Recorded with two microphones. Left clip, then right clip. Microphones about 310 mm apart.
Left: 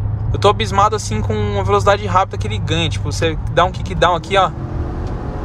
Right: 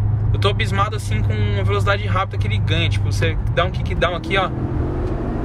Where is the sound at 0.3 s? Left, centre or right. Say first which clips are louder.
Left 8 dB; centre.